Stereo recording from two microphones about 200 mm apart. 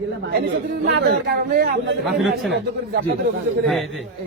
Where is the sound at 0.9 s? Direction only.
60° right (ahead or behind).